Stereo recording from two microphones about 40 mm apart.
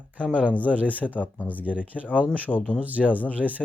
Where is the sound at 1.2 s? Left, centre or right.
Left.